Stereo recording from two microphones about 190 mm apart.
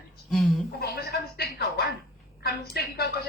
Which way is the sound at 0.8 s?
55° left (ahead or behind).